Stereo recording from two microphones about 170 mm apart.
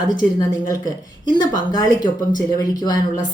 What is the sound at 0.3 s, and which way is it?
A woman's voice, 25° left (ahead or behind).